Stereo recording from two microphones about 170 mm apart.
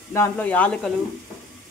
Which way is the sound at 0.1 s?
10° left (ahead or behind).